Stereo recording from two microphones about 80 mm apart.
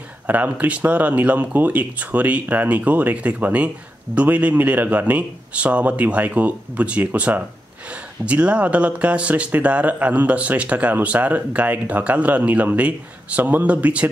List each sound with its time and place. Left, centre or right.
0.3 s speech: centre